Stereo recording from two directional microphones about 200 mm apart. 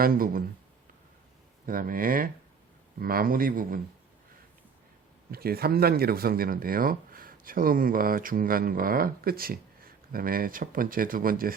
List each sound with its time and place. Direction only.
0.0 s speech: 45° right (ahead or behind)
1.6 s speech: 45° right (ahead or behind)
5.3 s speech: 50° right (ahead or behind)